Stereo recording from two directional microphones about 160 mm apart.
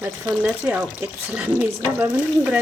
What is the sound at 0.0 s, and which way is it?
Speech, 10° right (ahead or behind).